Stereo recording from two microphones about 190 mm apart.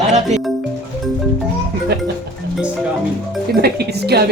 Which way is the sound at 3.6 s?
60° right (ahead or behind).